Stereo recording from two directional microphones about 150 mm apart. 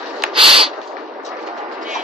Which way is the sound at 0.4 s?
35° right (ahead or behind).